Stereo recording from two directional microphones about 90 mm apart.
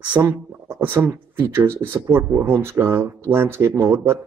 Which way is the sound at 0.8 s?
25° right (ahead or behind).